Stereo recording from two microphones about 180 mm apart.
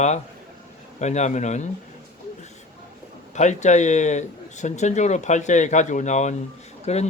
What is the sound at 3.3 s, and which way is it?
A man's voice, 40° left (ahead or behind).